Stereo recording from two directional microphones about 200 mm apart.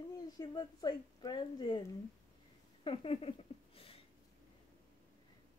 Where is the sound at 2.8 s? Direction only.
25° left (ahead or behind).